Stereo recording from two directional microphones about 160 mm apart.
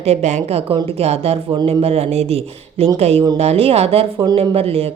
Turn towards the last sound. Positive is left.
turn(degrees=-40)  # may be behind; listen again after turning